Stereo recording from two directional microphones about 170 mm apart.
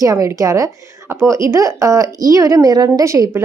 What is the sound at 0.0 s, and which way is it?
A woman's voice, 20° right (ahead or behind).